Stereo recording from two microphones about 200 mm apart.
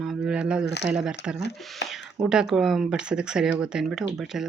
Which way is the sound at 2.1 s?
5° right (ahead or behind).